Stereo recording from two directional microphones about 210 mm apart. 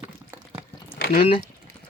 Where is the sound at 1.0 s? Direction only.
45° left (ahead or behind).